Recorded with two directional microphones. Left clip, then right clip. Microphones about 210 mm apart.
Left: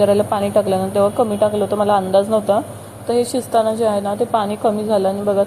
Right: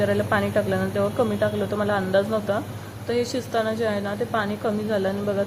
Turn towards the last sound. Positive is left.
turn(degrees=10)  # may be behind; listen again after turning